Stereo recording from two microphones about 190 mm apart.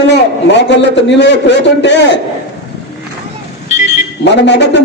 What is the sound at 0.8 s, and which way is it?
A man's voice, 65° left (ahead or behind).